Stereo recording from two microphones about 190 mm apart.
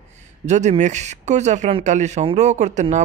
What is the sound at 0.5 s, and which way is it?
Speech, 40° right (ahead or behind).